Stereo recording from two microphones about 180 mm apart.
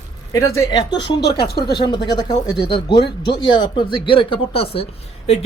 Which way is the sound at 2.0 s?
25° left (ahead or behind).